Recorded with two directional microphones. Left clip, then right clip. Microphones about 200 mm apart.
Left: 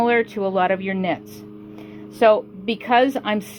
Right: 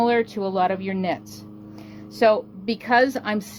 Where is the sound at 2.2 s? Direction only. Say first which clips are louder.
Left 3 dB; 15° left (ahead or behind).